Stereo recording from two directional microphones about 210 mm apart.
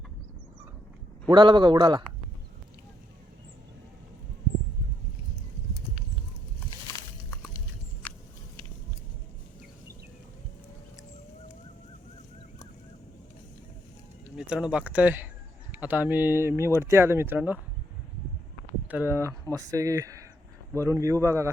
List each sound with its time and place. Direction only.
1.3 s speech: 20° right (ahead or behind)
6.9 s a sound: 15° left (ahead or behind)
8.0 s vehicle: 10° left (ahead or behind)
14.3 s speech: 5° right (ahead or behind)
18.9 s speech: 10° right (ahead or behind)